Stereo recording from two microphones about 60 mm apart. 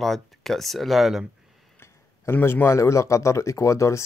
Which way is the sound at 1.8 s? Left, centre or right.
Left.